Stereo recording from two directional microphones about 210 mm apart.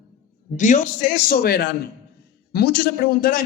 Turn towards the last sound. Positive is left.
turn(degrees=45)  # may be behind; listen again after turning